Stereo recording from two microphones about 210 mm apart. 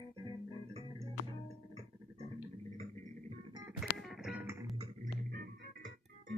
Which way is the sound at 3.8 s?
Centre (ahead or behind).